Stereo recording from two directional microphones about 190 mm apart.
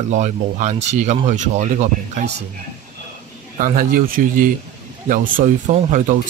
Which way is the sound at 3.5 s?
45° right (ahead or behind).